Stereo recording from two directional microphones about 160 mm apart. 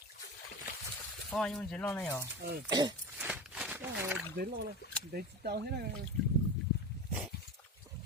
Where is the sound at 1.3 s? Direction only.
5° left (ahead or behind).